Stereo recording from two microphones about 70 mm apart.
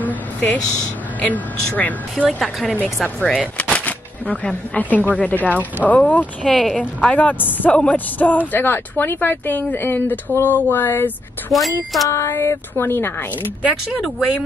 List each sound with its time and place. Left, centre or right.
0.0 s a sound: left
1.2 s speech: left
3.5 s shuffling cards: centre
4.7 s speech: left
6.4 s speech: centre
7.0 s speech: centre
11.5 s speech: centre
12.1 s speech: left